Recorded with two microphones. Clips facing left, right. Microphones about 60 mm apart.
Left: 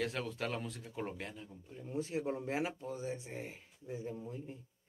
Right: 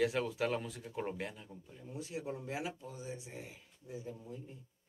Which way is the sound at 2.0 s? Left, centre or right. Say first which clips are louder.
Left 5 dB; left.